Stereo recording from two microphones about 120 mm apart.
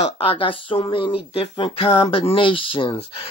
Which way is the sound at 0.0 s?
55° left (ahead or behind).